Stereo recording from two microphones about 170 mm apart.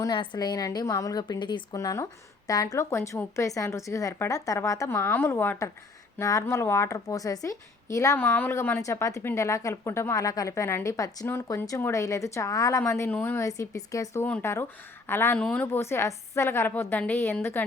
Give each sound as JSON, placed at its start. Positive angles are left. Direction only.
{"t": 0.0, "sound": "a woman's voice", "side_deg": 25}